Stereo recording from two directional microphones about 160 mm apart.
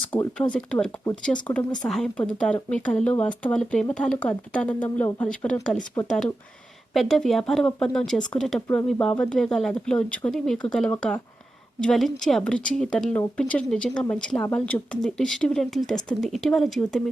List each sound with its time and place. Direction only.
0.1 s a woman's voice: 15° left (ahead or behind)
6.9 s a woman's voice: centre (ahead or behind)
8.6 s speech: 15° left (ahead or behind)
8.9 s a woman's voice: 5° left (ahead or behind)